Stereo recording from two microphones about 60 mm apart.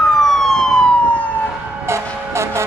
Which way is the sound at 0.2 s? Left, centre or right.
Centre.